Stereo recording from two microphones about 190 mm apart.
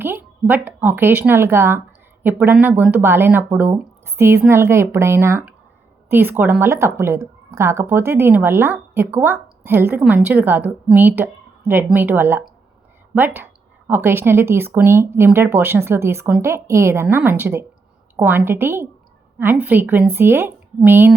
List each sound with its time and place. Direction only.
0.0 s a woman's voice: 10° right (ahead or behind)